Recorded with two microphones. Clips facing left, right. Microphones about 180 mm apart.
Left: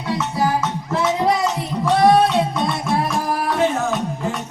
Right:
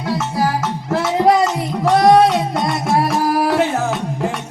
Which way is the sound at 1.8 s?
75° right (ahead or behind).